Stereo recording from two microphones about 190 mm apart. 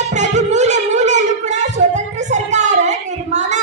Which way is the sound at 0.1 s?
40° right (ahead or behind).